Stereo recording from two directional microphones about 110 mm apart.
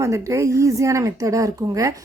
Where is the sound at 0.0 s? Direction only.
30° right (ahead or behind).